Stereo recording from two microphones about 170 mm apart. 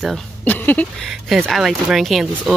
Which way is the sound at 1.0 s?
Centre (ahead or behind).